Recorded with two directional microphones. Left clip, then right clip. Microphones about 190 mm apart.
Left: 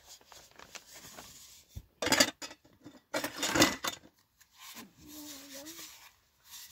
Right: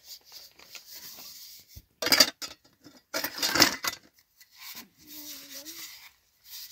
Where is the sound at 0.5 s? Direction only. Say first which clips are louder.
Right 3 dB; 55° left (ahead or behind).